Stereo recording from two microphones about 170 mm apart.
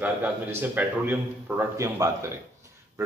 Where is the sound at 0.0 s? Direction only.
10° right (ahead or behind).